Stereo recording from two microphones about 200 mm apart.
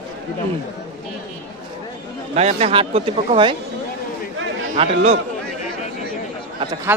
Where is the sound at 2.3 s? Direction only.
30° right (ahead or behind).